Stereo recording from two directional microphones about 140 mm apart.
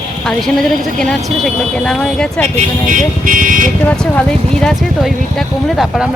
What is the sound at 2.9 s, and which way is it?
Speech, 75° right (ahead or behind).